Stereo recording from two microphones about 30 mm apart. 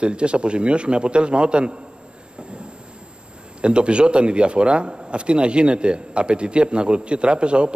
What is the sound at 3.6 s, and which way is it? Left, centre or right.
A man's voice, right.